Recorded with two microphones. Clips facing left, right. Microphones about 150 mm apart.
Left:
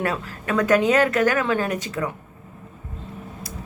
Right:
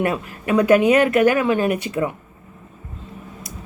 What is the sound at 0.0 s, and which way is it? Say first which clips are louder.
Speech: right 4 dB; 15° right (ahead or behind).